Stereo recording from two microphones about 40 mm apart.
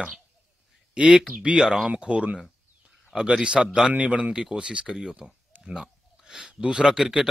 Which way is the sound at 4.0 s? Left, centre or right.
Right.